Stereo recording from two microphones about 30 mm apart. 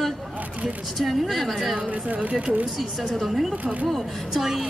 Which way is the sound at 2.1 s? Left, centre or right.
Right.